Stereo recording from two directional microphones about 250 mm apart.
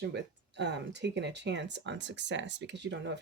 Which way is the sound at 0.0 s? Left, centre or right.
Right.